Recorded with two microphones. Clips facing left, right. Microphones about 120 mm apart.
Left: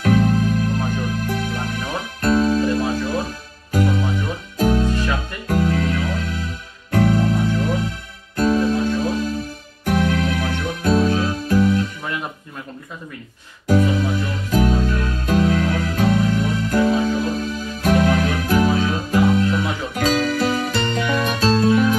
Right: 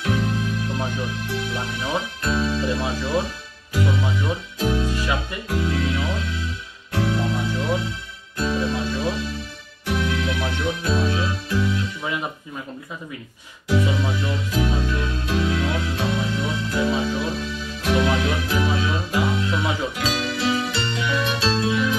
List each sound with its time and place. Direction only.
0.0 s music: 45° left (ahead or behind)
12.0 s music: 5° right (ahead or behind)
13.7 s music: 45° left (ahead or behind)